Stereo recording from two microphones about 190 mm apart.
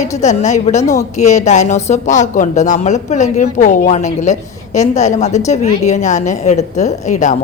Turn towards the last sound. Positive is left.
turn(degrees=40)  # may be behind; listen again after turning